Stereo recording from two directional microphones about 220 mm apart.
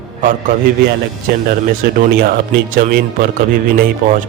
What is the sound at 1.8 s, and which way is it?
A man's voice, 45° right (ahead or behind).